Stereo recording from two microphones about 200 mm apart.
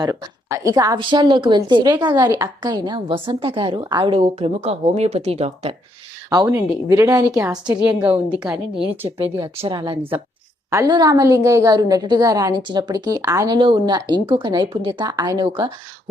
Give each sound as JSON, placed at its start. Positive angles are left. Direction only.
{"t": 0.0, "sound": "a woman's voice", "side_deg": -15}
{"t": 6.3, "sound": "a woman's voice", "side_deg": -20}
{"t": 9.0, "sound": "a woman's voice", "side_deg": -30}